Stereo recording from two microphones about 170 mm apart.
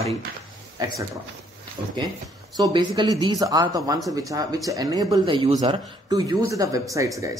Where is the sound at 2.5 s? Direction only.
20° right (ahead or behind).